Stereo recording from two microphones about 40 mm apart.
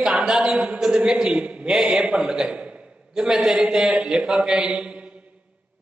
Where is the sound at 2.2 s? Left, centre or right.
Centre.